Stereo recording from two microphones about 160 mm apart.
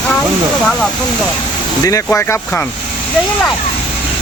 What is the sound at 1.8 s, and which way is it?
Speech, 20° left (ahead or behind).